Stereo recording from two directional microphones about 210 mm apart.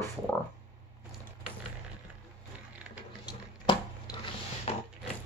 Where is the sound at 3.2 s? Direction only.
20° left (ahead or behind).